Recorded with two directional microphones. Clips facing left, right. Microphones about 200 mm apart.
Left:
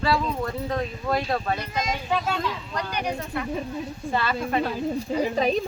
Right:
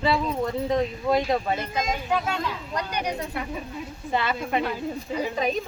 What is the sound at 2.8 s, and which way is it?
A woman's voice, 20° right (ahead or behind).